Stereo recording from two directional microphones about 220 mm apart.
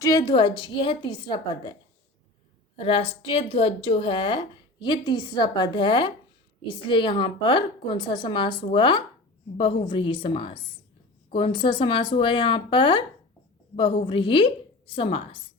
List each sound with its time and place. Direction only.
0.0 s a woman's voice: 15° left (ahead or behind)
2.7 s a woman's voice: 25° left (ahead or behind)